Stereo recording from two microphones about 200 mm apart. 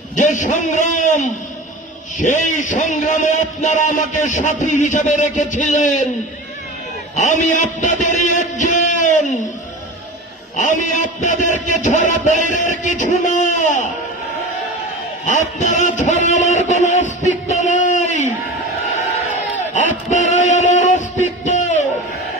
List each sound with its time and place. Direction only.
0.1 s a man's voice: 40° left (ahead or behind)
7.2 s a man's voice: 40° left (ahead or behind)
10.5 s a man's voice: 40° left (ahead or behind)
15.2 s a man's voice: 40° left (ahead or behind)
17.3 s a sound: 35° left (ahead or behind)
19.7 s a sound: 40° left (ahead or behind)